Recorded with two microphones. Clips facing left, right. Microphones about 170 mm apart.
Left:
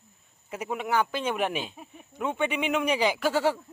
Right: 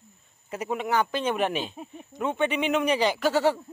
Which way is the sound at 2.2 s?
5° left (ahead or behind).